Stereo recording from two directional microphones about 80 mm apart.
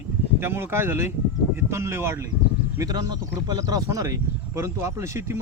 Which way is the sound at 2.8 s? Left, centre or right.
Right.